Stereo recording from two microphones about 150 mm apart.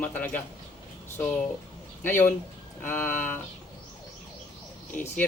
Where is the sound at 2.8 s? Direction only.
15° left (ahead or behind).